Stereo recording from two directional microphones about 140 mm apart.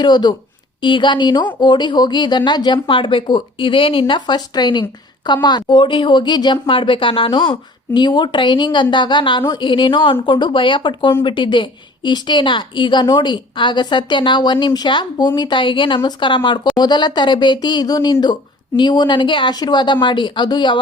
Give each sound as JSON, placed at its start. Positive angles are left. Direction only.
{"t": 0.0, "sound": "speech", "side_deg": 30}